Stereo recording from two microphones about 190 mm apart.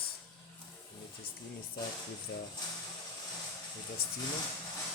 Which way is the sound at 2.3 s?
60° left (ahead or behind).